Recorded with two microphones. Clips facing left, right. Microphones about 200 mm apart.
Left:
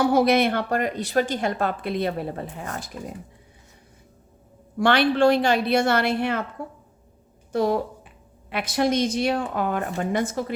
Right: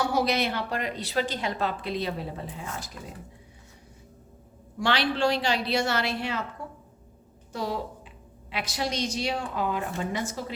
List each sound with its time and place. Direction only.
0.0 s a woman's voice: 55° left (ahead or behind)
4.8 s a woman's voice: 55° left (ahead or behind)
7.5 s a woman's voice: 55° left (ahead or behind)